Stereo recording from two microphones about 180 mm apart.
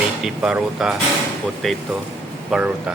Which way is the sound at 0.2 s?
5° right (ahead or behind).